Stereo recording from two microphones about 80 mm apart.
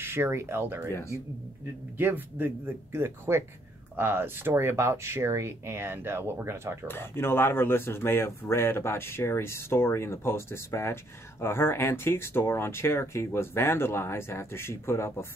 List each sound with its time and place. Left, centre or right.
0.0 s speech: right
0.8 s speech: left
2.0 s speech: right
6.9 s speech: left